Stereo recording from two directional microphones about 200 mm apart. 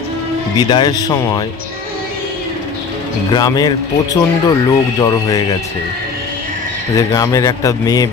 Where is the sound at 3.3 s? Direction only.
20° left (ahead or behind).